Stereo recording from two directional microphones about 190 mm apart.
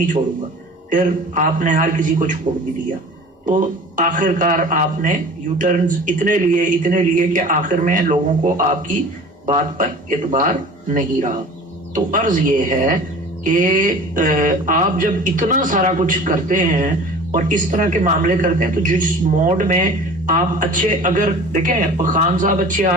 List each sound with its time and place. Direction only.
0.9 s a man's voice: 45° right (ahead or behind)
3.4 s a man's voice: 45° right (ahead or behind)